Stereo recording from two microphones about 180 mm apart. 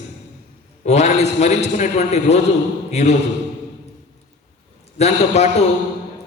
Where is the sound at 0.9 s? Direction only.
40° left (ahead or behind).